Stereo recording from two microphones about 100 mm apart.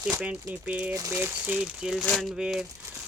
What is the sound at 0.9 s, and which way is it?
Speech, 35° right (ahead or behind).